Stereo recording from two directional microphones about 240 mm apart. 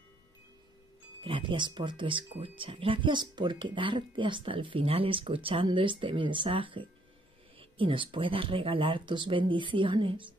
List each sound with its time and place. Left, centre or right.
1.2 s speech: right